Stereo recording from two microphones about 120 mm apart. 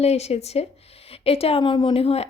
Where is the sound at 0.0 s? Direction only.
60° left (ahead or behind).